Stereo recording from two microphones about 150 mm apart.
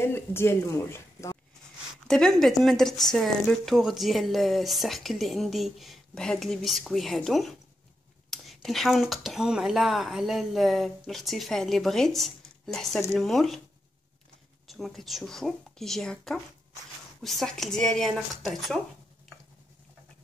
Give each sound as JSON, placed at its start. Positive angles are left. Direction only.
{"t": 0.0, "sound": "speech", "side_deg": 15}
{"t": 2.0, "sound": "speech", "side_deg": 5}
{"t": 14.7, "sound": "speech", "side_deg": 0}